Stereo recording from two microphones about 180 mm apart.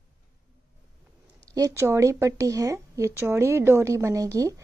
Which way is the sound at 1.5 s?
15° right (ahead or behind).